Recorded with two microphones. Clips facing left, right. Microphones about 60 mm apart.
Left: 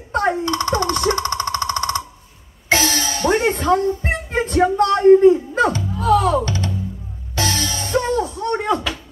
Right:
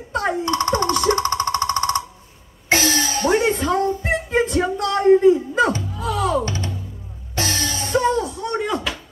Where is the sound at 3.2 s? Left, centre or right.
Left.